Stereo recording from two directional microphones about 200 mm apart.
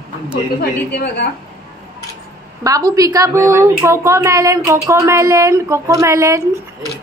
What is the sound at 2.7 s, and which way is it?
A woman's voice, 15° right (ahead or behind).